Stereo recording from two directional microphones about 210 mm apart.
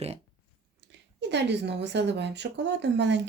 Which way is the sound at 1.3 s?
55° right (ahead or behind).